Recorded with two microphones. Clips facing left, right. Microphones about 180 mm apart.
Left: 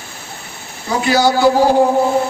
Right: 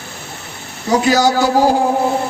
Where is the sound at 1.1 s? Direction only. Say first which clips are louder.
Left 1 dB; 40° right (ahead or behind).